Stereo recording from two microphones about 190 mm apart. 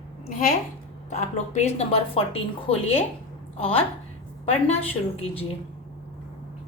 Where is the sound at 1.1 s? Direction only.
35° left (ahead or behind).